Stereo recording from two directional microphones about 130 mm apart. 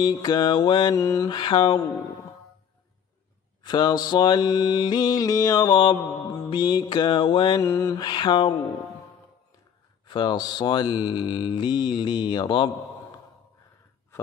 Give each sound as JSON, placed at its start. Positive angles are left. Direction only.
{"t": 0.0, "sound": "mantra", "side_deg": 35}
{"t": 0.9, "sound": "mantra", "side_deg": 25}
{"t": 1.3, "sound": "mantra", "side_deg": 40}
{"t": 3.6, "sound": "mantra", "side_deg": 35}
{"t": 7.6, "sound": "mantra", "side_deg": 20}
{"t": 8.0, "sound": "mantra", "side_deg": 35}
{"t": 10.0, "sound": "mantra", "side_deg": 35}